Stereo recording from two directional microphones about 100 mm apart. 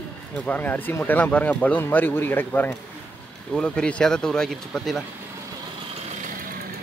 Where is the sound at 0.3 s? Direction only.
15° left (ahead or behind).